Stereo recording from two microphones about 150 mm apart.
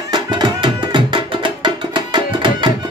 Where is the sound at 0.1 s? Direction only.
30° right (ahead or behind).